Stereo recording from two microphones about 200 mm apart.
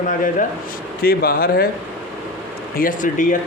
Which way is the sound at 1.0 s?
50° left (ahead or behind).